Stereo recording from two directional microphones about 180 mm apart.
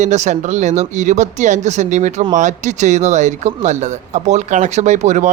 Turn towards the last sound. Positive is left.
turn(degrees=-40)  # may be behind; listen again after turning